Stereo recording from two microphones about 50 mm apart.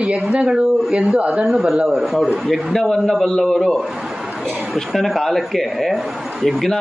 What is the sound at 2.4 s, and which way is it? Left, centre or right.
A man's voice, centre.